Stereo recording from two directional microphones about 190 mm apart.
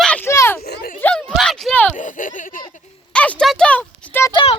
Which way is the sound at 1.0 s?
5° left (ahead or behind).